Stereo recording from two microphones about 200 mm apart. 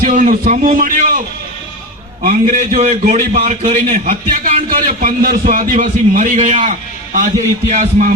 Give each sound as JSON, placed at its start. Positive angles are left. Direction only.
{"t": 0.0, "sound": "a man's voice", "side_deg": -40}
{"t": 2.2, "sound": "a man's voice", "side_deg": -40}